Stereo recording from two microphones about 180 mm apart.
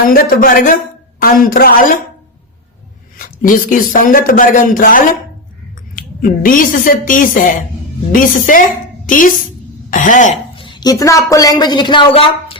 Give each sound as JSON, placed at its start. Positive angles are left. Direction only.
{"t": 0.1, "sound": "speech", "side_deg": 55}
{"t": 3.2, "sound": "a woman's voice", "side_deg": 50}
{"t": 10.6, "sound": "a woman's voice", "side_deg": 25}